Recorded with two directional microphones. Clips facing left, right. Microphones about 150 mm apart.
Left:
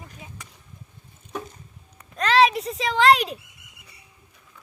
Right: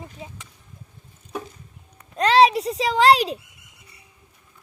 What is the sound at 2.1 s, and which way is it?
Babbling, 30° right (ahead or behind).